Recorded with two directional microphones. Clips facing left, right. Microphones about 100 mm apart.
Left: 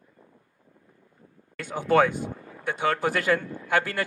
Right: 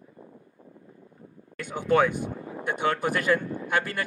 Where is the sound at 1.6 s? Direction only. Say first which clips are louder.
Left 1 dB; 20° right (ahead or behind).